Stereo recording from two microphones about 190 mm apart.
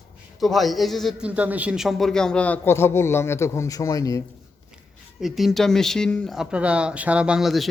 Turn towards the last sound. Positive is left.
turn(degrees=0)  # may be behind; listen again after turning